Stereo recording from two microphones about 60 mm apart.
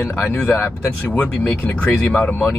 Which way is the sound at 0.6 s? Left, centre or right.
Left.